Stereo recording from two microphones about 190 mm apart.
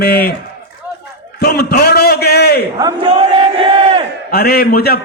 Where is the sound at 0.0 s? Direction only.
55° left (ahead or behind).